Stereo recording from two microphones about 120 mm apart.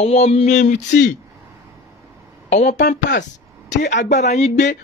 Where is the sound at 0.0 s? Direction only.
60° left (ahead or behind); by 0.8 s 85° left.